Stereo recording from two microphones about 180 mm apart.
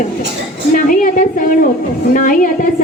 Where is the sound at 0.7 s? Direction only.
50° left (ahead or behind).